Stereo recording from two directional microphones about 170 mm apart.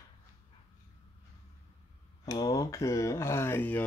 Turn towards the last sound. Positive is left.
turn(degrees=10)  # may be behind; listen again after turning